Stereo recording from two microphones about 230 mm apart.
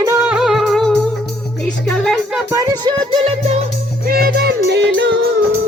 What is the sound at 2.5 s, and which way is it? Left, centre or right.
Music, centre.